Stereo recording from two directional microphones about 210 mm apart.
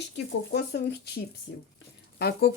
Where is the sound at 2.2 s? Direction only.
50° left (ahead or behind).